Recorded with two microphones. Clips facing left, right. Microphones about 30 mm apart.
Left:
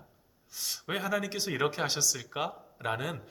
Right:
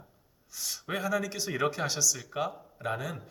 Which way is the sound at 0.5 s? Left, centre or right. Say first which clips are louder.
Even; left.